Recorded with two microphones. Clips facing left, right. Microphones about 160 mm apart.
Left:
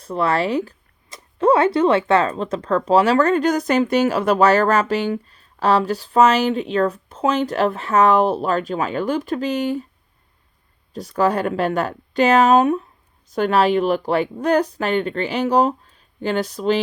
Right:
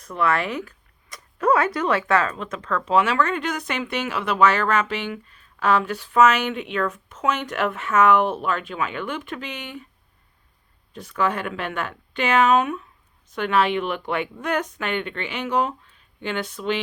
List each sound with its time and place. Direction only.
0.0 s speech: 30° left (ahead or behind)
10.9 s speech: 35° left (ahead or behind)